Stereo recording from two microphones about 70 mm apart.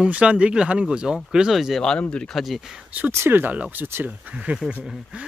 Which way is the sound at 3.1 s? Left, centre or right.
Right.